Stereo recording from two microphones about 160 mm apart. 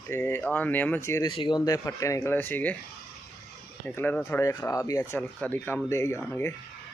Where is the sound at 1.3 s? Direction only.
30° left (ahead or behind); by 2.8 s 10° left (ahead or behind).